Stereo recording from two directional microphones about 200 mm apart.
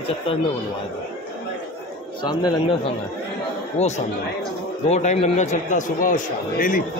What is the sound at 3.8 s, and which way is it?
A man's voice, 35° left (ahead or behind).